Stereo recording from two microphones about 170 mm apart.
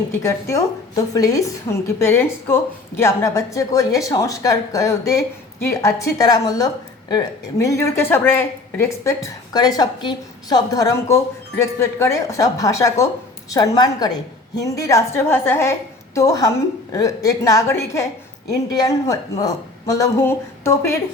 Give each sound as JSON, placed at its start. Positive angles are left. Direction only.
{"t": 0.1, "sound": "a woman's voice", "side_deg": 15}